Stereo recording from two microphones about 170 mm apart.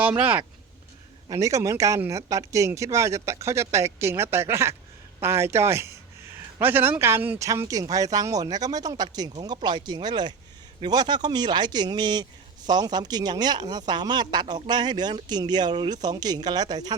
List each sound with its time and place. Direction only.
0.0 s speech: 10° right (ahead or behind)
1.3 s speech: 20° right (ahead or behind)